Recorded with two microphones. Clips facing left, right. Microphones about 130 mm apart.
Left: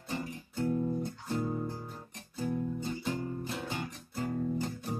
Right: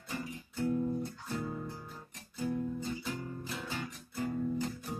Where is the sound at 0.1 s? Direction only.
30° left (ahead or behind).